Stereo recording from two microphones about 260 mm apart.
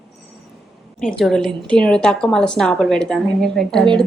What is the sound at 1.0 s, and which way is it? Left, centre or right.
A woman's voice, centre.